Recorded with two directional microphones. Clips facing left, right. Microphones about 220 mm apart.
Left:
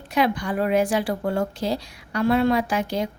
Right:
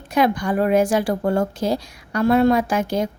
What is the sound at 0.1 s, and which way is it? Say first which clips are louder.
A woman's voice: right 4 dB; 45° right (ahead or behind).